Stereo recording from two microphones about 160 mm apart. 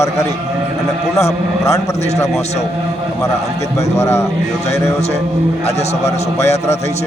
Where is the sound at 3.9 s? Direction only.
15° left (ahead or behind).